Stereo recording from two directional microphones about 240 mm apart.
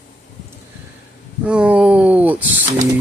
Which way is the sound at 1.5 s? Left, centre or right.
Centre.